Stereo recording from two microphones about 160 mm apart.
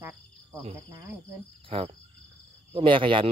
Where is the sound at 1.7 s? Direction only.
35° right (ahead or behind).